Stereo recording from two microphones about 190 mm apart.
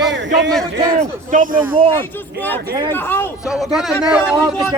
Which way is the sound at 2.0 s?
10° left (ahead or behind).